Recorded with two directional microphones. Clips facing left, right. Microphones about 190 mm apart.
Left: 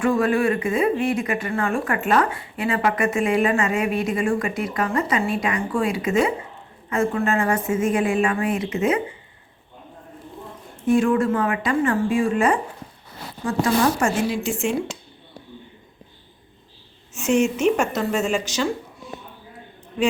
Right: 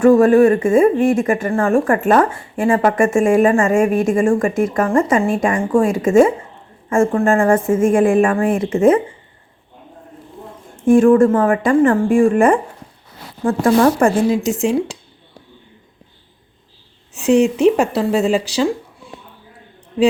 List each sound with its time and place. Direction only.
0.0 s speech: 45° right (ahead or behind)
10.8 s speech: 45° right (ahead or behind)
14.3 s speech: 40° right (ahead or behind)
17.2 s speech: 35° right (ahead or behind)